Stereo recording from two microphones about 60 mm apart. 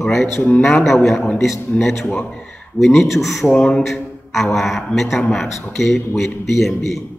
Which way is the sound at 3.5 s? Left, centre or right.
Centre.